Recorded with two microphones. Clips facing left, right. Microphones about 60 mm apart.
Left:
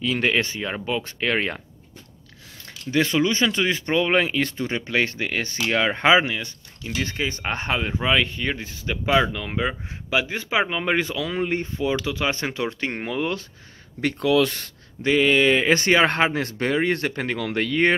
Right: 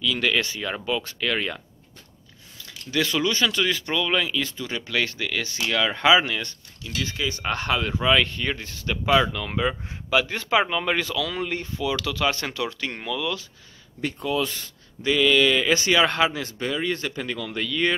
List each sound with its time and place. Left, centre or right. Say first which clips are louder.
0.0 s speech: left 2 dB; left
2.6 s speech: left 3 dB; left
4.6 s speech: left 3 dB; left
6.2 s speech: left 1 dB; centre
6.8 s speech: left 2 dB; left
14.0 s speech: left 6 dB; left
15.0 s speech: left 2 dB; left
16.4 s speech: left 4 dB; left